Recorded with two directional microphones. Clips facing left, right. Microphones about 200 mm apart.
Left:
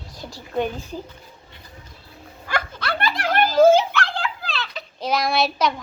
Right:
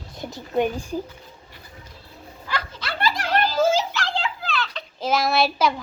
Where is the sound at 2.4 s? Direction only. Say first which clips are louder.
Left 4 dB; 55° left (ahead or behind).